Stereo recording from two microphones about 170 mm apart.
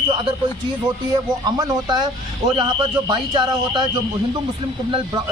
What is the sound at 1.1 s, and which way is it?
Speech, 25° right (ahead or behind).